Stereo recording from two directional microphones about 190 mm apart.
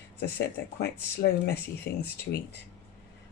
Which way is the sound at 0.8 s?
60° left (ahead or behind).